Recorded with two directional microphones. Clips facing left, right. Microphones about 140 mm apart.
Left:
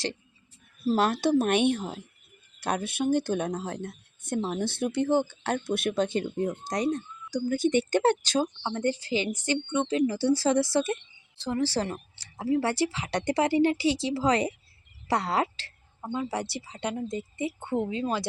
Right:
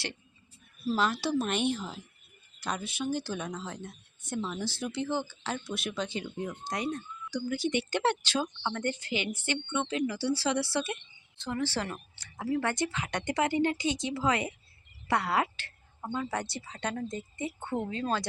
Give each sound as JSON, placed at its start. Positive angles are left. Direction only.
{"t": 0.9, "sound": "a woman's voice", "side_deg": 50}
{"t": 16.7, "sound": "speech", "side_deg": 15}
{"t": 17.1, "sound": "a woman's voice", "side_deg": 25}